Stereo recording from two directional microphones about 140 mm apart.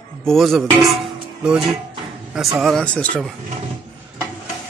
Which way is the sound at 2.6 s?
5° left (ahead or behind).